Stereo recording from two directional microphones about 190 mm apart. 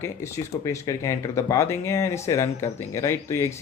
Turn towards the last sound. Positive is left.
turn(degrees=15)  # may be behind; listen again after turning